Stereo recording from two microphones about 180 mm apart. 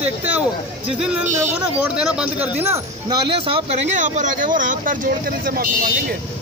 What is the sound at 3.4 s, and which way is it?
Speech, 30° right (ahead or behind).